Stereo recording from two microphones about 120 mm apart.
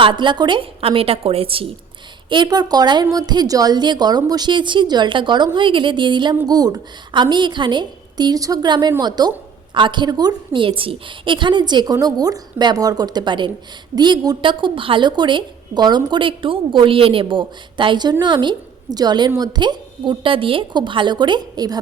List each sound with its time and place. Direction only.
0.0 s a woman's voice: 45° right (ahead or behind)
2.3 s a woman's voice: 35° right (ahead or behind)